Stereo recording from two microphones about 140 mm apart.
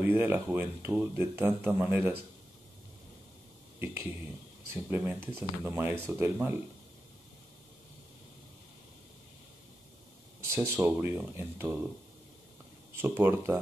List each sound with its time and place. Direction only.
0.0 s speech: 15° right (ahead or behind)
3.8 s speech: 20° right (ahead or behind)
10.4 s speech: 20° right (ahead or behind)
12.9 s speech: 15° right (ahead or behind)